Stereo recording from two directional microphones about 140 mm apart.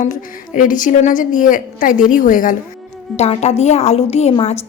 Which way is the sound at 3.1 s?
50° left (ahead or behind).